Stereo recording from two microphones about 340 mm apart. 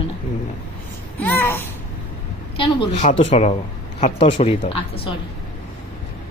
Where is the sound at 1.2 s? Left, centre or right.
Centre.